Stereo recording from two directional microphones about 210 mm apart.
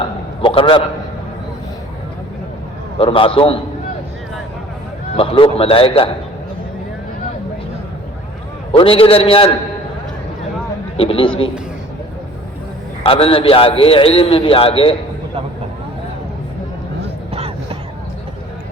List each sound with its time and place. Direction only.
0.4 s a man's voice: 25° left (ahead or behind)
3.0 s a man's voice: 25° left (ahead or behind)
5.1 s a man's voice: 25° left (ahead or behind)
8.7 s a man's voice: 25° left (ahead or behind)
10.9 s a man's voice: 25° left (ahead or behind)
13.0 s a man's voice: 25° left (ahead or behind)
17.3 s a sound: 30° right (ahead or behind)